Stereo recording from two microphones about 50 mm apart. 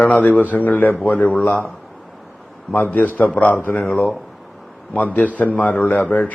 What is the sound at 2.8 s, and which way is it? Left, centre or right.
A man's voice, left.